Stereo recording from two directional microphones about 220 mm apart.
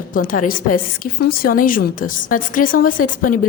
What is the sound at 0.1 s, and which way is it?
A woman's voice, 40° left (ahead or behind).